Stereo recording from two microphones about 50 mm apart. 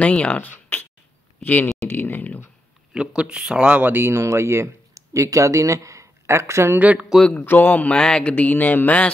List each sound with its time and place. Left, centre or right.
0.0 s speech: left
2.9 s speech: centre
3.8 s speech: right
6.8 s speech: right
7.4 s speech: left
7.9 s speech: centre